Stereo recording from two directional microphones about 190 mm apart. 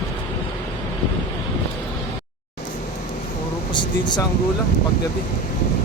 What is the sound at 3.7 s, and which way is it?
Air conditioning, 25° left (ahead or behind).